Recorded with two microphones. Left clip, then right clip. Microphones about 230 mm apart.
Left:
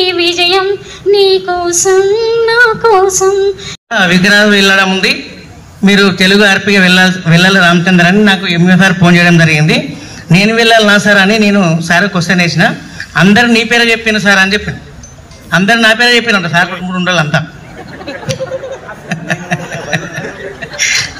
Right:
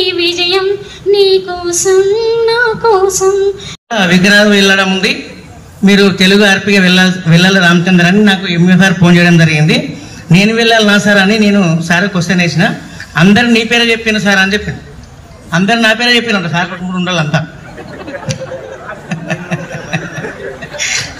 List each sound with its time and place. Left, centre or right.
0.0 s child singing: centre
5.8 s a man's voice: centre
19.0 s a sound: centre
20.7 s chuckle: centre